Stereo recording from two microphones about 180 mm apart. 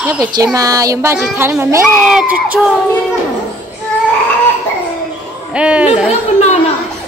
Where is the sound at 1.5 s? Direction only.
15° right (ahead or behind).